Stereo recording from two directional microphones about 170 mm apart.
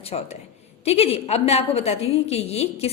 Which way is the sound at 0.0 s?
35° left (ahead or behind).